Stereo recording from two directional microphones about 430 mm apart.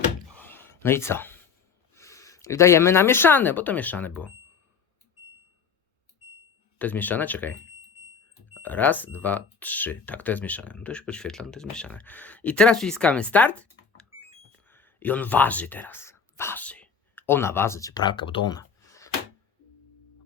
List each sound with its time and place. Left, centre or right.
0.3 s a sound: centre
2.0 s speech: centre
6.7 s speech: centre
8.6 s speech: centre
14.7 s speech: centre